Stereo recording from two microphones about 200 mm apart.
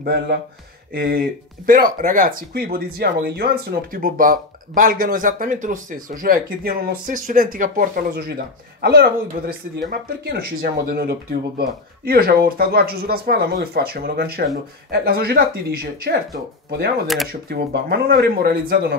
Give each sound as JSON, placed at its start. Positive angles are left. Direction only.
{"t": 0.0, "sound": "speech", "side_deg": -55}
{"t": 9.5, "sound": "speech", "side_deg": -50}
{"t": 17.3, "sound": "speech", "side_deg": -50}